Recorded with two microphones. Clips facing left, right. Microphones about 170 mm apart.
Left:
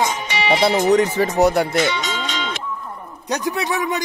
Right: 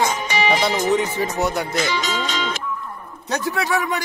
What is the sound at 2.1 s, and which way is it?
Music, 40° right (ahead or behind).